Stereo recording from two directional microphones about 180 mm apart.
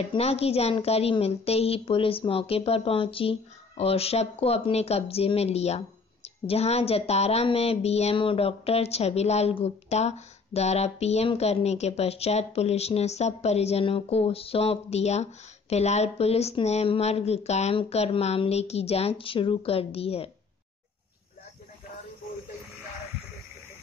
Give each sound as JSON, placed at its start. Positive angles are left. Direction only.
{"t": 0.0, "sound": "a woman's voice", "side_deg": 35}